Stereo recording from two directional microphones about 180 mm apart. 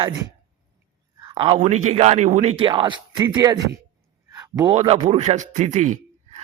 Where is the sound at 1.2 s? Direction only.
25° right (ahead or behind).